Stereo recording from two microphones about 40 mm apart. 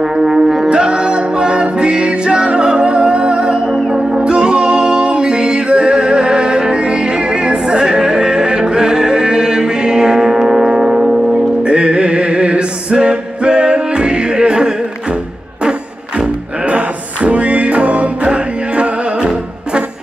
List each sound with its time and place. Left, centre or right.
0.2 s music: centre
0.7 s music: right
11.6 s music: right
16.6 s music: right